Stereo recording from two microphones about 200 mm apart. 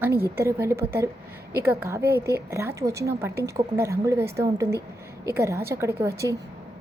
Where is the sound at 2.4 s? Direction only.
15° right (ahead or behind).